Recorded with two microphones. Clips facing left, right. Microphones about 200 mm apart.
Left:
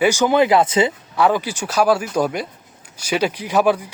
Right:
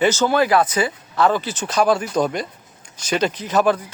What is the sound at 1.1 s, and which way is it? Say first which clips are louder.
Speech: left 1 dB; 10° left (ahead or behind).